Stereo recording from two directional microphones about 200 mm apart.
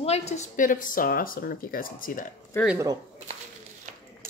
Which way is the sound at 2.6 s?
10° left (ahead or behind).